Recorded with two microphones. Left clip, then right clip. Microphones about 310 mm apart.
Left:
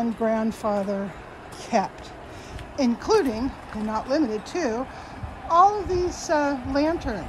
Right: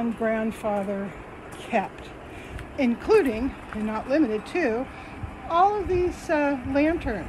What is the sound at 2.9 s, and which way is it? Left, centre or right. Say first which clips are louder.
Speech: right 2 dB; centre.